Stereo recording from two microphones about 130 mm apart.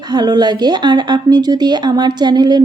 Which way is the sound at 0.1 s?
35° right (ahead or behind).